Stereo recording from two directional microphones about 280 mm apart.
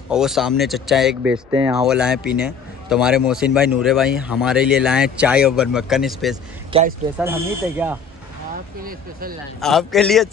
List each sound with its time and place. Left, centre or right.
0.1 s speech: centre
6.7 s speech: right
7.2 s speech: centre
9.6 s speech: centre